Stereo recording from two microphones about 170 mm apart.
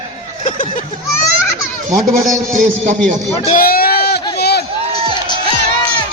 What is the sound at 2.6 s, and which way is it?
Speech, 45° right (ahead or behind).